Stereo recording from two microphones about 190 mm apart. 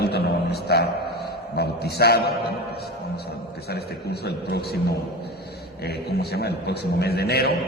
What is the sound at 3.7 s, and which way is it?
A man's voice, 60° left (ahead or behind).